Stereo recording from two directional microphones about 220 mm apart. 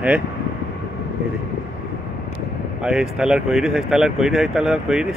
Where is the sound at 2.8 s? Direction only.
5° right (ahead or behind).